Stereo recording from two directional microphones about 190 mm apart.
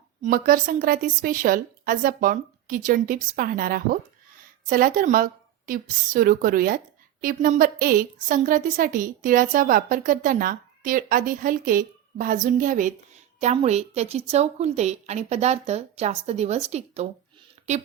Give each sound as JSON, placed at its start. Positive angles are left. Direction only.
{"t": 0.2, "sound": "a woman's voice", "side_deg": -50}